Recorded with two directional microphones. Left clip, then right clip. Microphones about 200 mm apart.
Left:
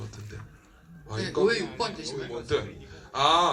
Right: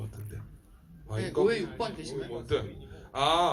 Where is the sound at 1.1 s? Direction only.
45° left (ahead or behind).